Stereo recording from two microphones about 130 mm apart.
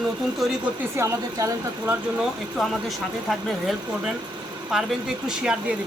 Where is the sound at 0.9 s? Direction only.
20° right (ahead or behind).